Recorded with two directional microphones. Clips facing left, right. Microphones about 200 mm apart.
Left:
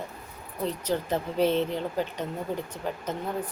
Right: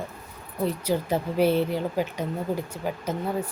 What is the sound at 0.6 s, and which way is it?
Speech, 10° right (ahead or behind).